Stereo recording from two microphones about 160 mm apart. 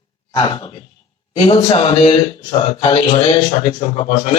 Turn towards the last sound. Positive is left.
turn(degrees=30)  # may be behind; listen again after turning